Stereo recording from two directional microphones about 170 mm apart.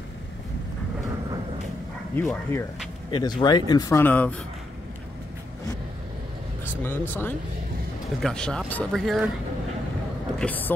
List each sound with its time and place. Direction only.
2.1 s speech: 10° left (ahead or behind)
3.1 s speech: 25° left (ahead or behind); by 4.4 s 10° left (ahead or behind)
6.8 s speech: 10° left (ahead or behind)
10.4 s speech: 10° left (ahead or behind)